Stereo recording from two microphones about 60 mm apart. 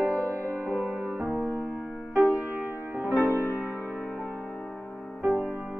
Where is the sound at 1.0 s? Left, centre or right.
Right.